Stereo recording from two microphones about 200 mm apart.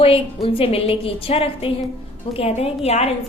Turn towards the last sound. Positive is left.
turn(degrees=30)  # may be behind; listen again after turning